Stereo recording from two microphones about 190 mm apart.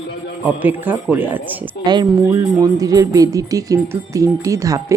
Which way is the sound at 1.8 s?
25° right (ahead or behind).